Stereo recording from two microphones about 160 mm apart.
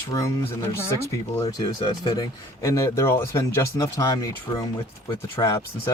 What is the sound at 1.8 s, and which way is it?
Speech, 25° left (ahead or behind).